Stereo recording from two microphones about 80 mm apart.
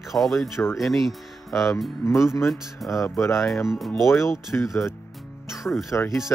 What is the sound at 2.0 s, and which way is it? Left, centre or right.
Speech, left.